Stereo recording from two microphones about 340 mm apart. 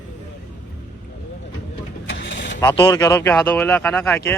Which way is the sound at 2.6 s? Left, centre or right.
Centre.